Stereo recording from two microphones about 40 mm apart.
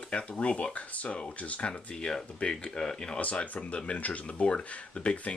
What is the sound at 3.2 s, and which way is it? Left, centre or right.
Speech, left.